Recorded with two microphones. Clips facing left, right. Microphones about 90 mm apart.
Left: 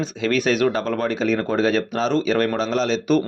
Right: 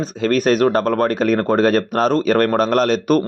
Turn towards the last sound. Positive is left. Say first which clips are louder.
# right 4 dB
turn(degrees=-55)  # may be behind; listen again after turning